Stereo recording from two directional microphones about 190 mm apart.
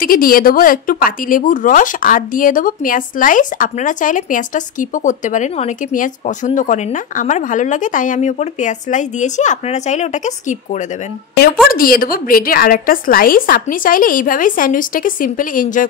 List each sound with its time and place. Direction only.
0.0 s speech: 50° left (ahead or behind)
11.7 s speech: 50° left (ahead or behind)